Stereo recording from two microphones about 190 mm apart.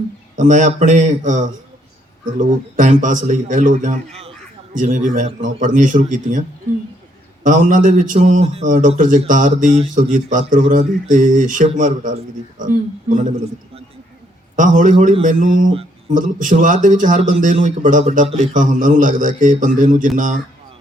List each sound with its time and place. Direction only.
0.3 s speech: 40° right (ahead or behind)
7.4 s speech: 45° right (ahead or behind)
14.5 s speech: 45° right (ahead or behind)